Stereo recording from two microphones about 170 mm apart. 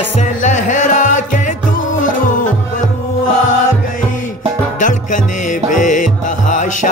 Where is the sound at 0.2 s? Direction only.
45° left (ahead or behind).